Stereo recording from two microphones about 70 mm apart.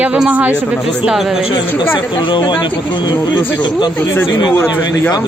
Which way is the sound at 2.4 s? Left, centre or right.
Left.